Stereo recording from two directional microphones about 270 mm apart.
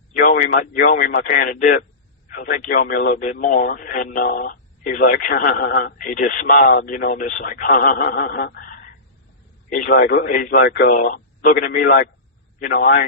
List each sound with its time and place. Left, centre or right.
0.2 s speech: left